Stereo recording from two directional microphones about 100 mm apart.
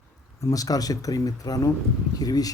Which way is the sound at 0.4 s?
35° left (ahead or behind).